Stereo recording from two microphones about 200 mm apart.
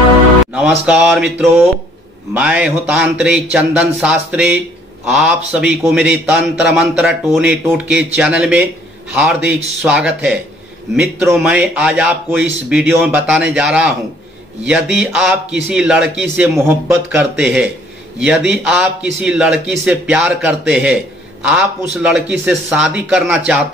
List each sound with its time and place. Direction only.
0.5 s a man's voice: 5° right (ahead or behind)
11.3 s a man's voice: 5° right (ahead or behind)
17.4 s a man's voice: centre (ahead or behind)